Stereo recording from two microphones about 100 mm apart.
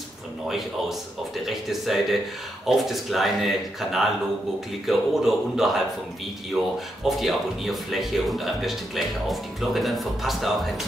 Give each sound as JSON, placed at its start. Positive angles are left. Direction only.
{"t": 1.4, "sound": "speech", "side_deg": 0}
{"t": 7.1, "sound": "speech", "side_deg": 0}